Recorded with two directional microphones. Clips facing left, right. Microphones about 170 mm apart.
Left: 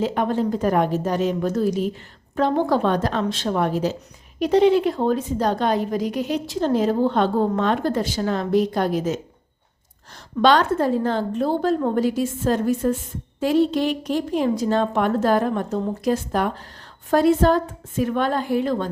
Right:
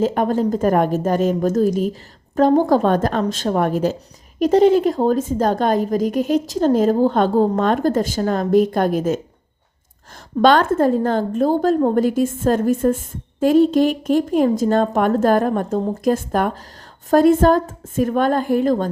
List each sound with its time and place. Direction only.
0.0 s a woman's voice: 45° right (ahead or behind)